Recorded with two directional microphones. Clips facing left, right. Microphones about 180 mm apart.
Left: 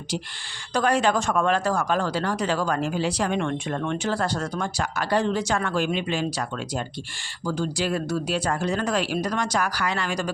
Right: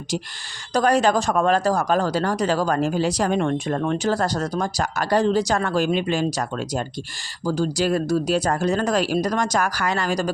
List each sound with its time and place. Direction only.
0.7 s speech: 40° right (ahead or behind)